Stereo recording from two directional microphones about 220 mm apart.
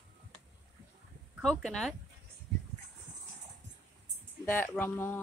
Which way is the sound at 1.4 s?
Centre (ahead or behind).